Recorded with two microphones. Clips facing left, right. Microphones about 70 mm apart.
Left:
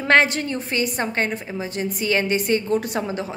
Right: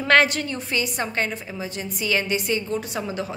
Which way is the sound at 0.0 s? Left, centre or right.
Left.